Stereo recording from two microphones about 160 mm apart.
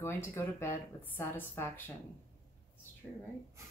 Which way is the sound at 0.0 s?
15° left (ahead or behind).